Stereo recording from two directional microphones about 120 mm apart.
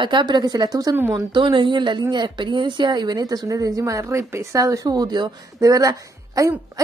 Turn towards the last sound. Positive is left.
turn(degrees=-30)  # may be behind; listen again after turning